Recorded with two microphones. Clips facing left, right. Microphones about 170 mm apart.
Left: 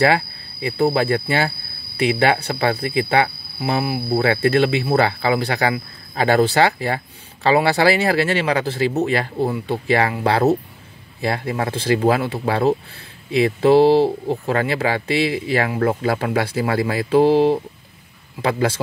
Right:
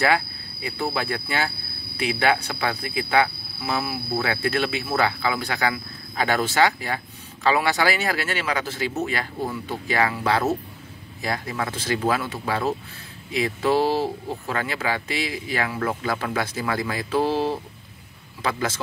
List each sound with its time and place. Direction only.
0.0 s speech: 30° left (ahead or behind)